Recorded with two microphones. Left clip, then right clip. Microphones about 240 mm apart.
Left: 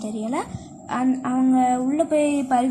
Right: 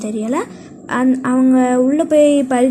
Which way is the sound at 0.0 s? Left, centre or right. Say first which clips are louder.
Right 7 dB; centre.